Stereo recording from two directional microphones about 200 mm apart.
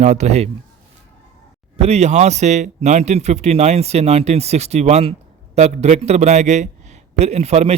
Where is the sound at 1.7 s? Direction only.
30° right (ahead or behind).